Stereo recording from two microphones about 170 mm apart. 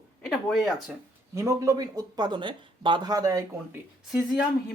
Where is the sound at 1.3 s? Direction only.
20° right (ahead or behind).